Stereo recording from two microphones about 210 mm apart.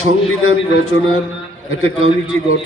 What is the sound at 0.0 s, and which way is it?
A man's voice, 90° left.